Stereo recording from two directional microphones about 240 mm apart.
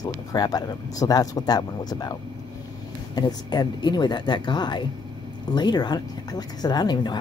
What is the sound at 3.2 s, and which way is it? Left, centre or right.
Speech, centre.